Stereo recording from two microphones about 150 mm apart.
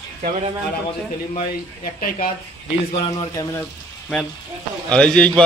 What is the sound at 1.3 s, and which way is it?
Speech, 60° left (ahead or behind).